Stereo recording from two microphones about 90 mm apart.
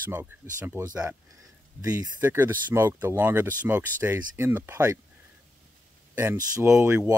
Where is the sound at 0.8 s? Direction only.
40° right (ahead or behind).